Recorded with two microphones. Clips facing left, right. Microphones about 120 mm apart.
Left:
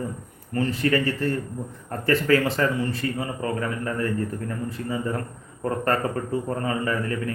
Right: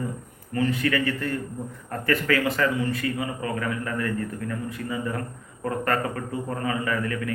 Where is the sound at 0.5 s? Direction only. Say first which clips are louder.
Left 1 dB; 30° left (ahead or behind).